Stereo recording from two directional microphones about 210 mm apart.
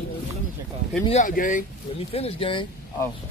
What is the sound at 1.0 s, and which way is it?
Speech, 35° left (ahead or behind).